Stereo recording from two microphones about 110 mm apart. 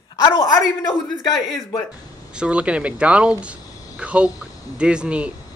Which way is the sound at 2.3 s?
10° right (ahead or behind).